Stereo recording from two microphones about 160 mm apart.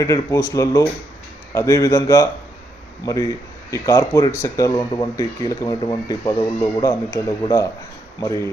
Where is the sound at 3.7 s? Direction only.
20° left (ahead or behind).